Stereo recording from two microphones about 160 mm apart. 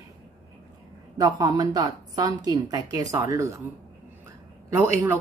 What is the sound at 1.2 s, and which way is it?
A woman's voice, 25° right (ahead or behind).